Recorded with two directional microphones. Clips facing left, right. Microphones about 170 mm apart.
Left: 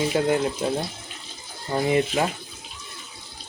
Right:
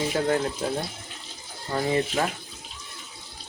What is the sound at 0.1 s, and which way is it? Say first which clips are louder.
Speech: left 3 dB; 15° left (ahead or behind).